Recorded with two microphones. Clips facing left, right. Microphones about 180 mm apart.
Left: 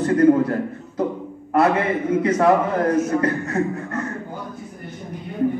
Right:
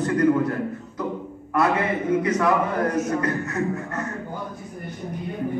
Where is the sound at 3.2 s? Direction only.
30° left (ahead or behind).